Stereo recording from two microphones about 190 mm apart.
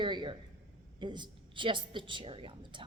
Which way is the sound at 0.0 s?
25° right (ahead or behind).